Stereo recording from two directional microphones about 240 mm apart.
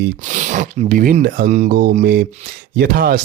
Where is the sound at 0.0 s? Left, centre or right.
Right.